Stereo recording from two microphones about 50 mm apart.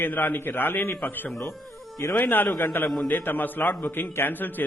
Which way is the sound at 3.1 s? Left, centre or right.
Left.